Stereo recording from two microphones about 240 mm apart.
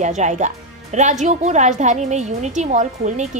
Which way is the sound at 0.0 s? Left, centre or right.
Right.